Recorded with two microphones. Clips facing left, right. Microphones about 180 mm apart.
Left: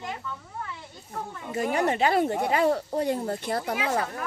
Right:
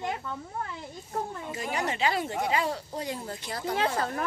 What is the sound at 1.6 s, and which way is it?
Speech, 50° left (ahead or behind).